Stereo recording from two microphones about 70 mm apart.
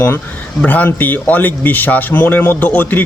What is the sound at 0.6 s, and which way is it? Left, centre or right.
A man's voice, left.